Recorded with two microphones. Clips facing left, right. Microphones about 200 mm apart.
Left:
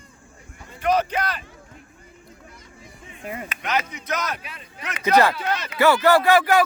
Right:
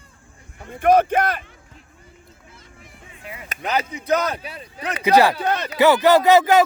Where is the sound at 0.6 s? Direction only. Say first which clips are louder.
Right 6 dB; 55° right (ahead or behind).